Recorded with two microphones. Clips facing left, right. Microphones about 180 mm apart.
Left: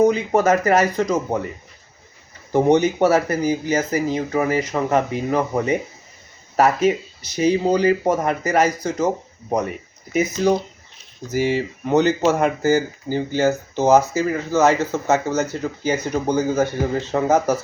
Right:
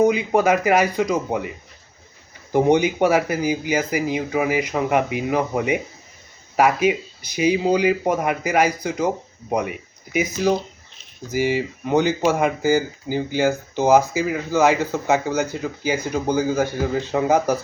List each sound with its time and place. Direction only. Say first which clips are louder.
0.0 s speech: left 1 dB; 10° right (ahead or behind)
2.5 s speech: left 1 dB; 10° right (ahead or behind)